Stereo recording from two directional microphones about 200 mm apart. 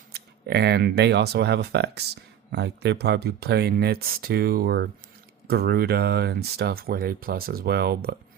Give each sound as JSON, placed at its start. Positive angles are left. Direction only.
{"t": 0.1, "sound": "speech", "side_deg": -55}